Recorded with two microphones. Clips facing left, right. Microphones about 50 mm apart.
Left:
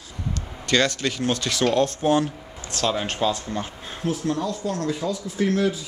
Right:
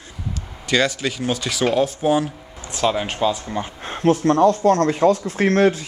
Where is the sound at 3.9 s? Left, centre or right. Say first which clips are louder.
Right 10 dB; right.